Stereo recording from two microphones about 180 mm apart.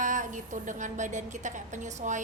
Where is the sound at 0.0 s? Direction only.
45° right (ahead or behind).